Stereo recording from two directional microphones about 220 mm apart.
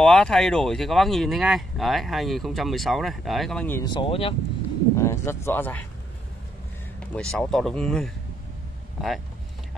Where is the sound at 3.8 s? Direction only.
20° left (ahead or behind).